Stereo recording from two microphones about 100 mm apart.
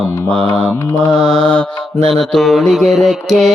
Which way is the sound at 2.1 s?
5° left (ahead or behind).